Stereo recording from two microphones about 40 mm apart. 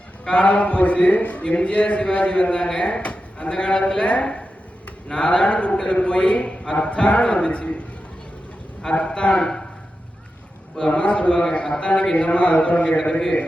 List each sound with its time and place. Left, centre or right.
0.3 s a man's voice: left
8.9 s a man's voice: left
10.8 s a man's voice: left